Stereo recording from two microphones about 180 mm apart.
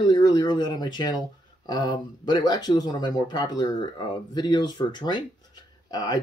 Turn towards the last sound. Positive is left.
turn(degrees=20)  # may be behind; listen again after turning